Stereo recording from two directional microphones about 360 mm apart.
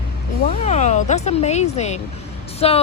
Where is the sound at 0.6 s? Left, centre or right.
Centre.